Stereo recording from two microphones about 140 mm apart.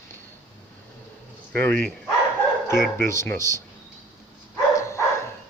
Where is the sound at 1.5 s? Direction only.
10° left (ahead or behind).